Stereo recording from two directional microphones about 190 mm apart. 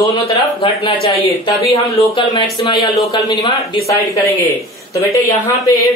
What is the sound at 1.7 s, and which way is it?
Speech, 25° left (ahead or behind).